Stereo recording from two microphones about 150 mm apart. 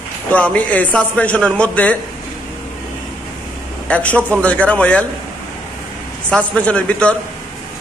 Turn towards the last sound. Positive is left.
turn(degrees=5)  # may be behind; listen again after turning